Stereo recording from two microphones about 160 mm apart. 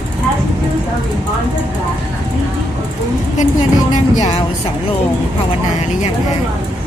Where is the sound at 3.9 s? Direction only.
50° left (ahead or behind).